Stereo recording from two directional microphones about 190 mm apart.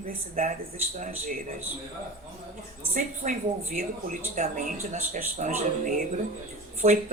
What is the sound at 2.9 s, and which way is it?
Speech, 45° right (ahead or behind).